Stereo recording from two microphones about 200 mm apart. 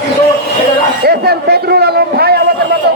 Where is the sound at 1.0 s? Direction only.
55° right (ahead or behind).